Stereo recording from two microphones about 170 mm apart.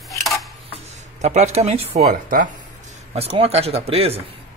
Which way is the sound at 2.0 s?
55° right (ahead or behind).